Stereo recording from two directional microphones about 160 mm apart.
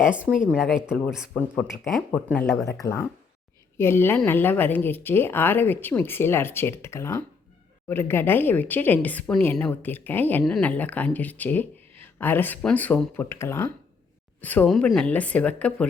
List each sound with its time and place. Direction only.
0.0 s a woman's voice: 10° right (ahead or behind)
1.3 s speech: 10° left (ahead or behind)